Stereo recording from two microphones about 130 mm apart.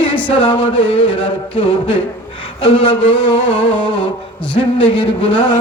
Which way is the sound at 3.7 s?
40° left (ahead or behind).